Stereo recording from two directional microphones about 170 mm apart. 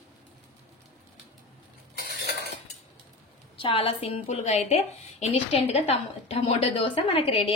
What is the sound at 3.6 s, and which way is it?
A woman's voice, 35° left (ahead or behind).